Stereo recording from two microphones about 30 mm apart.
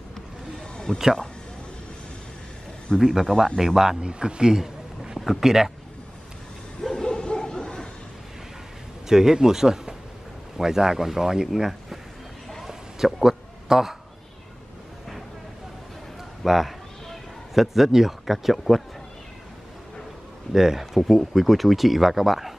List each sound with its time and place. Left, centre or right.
0.9 s speech: left
2.9 s a man's voice: left
3.5 s a man's voice: centre
4.0 s speech: right; by 5.7 s centre
6.9 s bow-wow: left
9.1 s a man's voice: centre
12.6 s a sound: centre
16.4 s a man's voice: centre
20.5 s a man's voice: centre
20.9 s speech: centre